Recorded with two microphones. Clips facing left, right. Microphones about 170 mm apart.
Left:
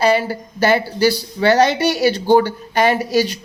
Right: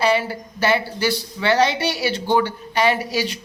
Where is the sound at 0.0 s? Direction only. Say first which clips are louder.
Left 3 dB; 40° left (ahead or behind).